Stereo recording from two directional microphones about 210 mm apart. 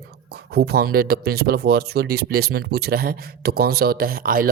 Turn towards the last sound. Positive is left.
turn(degrees=-45)  # may be behind; listen again after turning